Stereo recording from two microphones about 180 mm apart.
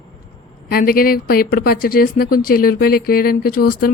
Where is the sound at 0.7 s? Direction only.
55° left (ahead or behind).